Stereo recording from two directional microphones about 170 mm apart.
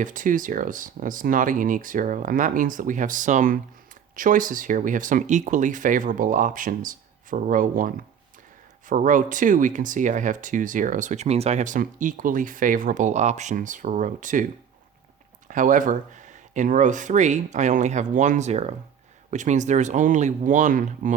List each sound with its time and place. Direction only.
0.0 s speech: 50° right (ahead or behind)
15.4 s speech: 50° right (ahead or behind)